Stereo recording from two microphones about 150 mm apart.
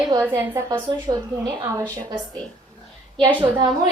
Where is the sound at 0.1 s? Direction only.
25° right (ahead or behind).